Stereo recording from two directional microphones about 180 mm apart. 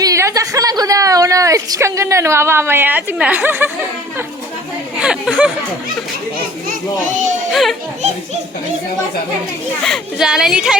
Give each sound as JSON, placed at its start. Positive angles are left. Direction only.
{"t": 0.0, "sound": "a woman's voice", "side_deg": -15}
{"t": 4.9, "sound": "speech", "side_deg": -5}
{"t": 7.5, "sound": "speech", "side_deg": 0}
{"t": 9.8, "sound": "speech", "side_deg": 0}